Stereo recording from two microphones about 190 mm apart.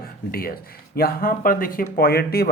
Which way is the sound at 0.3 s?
50° left (ahead or behind).